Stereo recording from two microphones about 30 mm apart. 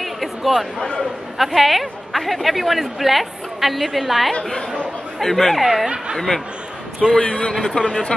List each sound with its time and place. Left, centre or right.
0.0 s a sound: centre
1.4 s a woman's voice: centre
5.6 s a woman's voice: centre
6.1 s speech: centre
7.2 s a man's voice: left
7.5 s speech: centre